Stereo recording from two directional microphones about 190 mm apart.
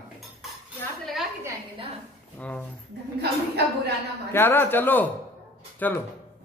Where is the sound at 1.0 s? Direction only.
Centre (ahead or behind).